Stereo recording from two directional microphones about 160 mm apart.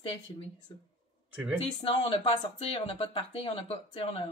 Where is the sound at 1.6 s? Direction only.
35° left (ahead or behind).